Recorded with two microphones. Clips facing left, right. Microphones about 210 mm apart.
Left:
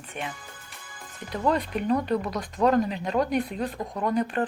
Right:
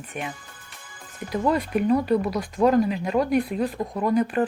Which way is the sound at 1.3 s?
10° right (ahead or behind).